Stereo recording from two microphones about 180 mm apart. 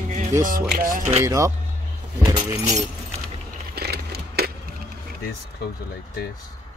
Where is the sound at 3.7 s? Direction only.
60° right (ahead or behind).